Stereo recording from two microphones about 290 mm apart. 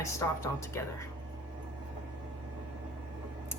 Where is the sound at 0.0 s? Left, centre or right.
Centre.